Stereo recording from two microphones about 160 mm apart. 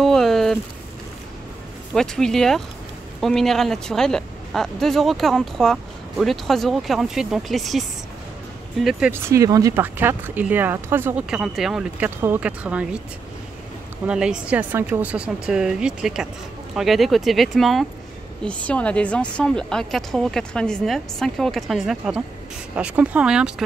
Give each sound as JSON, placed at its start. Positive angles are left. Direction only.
{"t": 0.0, "sound": "a sound", "side_deg": 0}
{"t": 2.0, "sound": "speech", "side_deg": 5}
{"t": 9.1, "sound": "speech", "side_deg": -20}
{"t": 14.0, "sound": "speech", "side_deg": -5}